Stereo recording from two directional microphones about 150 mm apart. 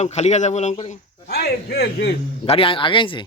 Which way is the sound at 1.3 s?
90° left.